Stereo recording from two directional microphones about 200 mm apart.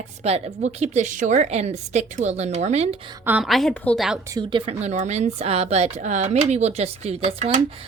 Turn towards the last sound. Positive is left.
turn(degrees=-35)  # may be behind; listen again after turning